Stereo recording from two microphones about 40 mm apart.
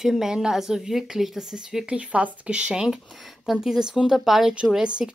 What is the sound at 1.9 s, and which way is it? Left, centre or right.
A woman's voice, right.